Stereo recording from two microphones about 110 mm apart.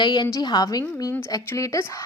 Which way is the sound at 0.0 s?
40° left (ahead or behind).